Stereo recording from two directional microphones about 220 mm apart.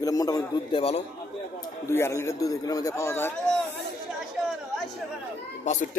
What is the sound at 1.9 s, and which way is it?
A man's voice, 10° left (ahead or behind).